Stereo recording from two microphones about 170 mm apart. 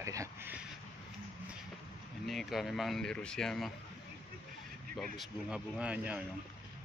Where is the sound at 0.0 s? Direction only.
20° right (ahead or behind).